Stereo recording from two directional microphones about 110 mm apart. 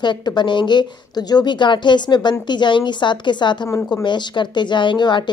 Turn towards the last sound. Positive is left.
turn(degrees=45)  # may be behind; listen again after turning